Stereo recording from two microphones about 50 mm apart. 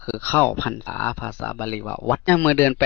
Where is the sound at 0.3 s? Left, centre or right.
Left.